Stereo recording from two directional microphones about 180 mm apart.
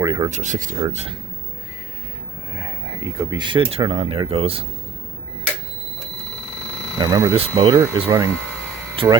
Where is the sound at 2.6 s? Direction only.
15° right (ahead or behind); by 4.6 s 35° right (ahead or behind).